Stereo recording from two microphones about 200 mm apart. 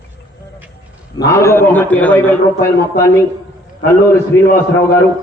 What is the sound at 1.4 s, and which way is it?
A man's voice, 15° left (ahead or behind).